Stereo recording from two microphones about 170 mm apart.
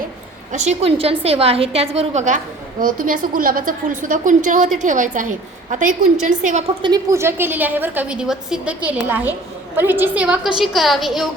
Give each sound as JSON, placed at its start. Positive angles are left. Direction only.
{"t": 0.5, "sound": "a woman's voice", "side_deg": -40}
{"t": 2.8, "sound": "a woman's voice", "side_deg": -55}
{"t": 6.8, "sound": "a woman's voice", "side_deg": -20}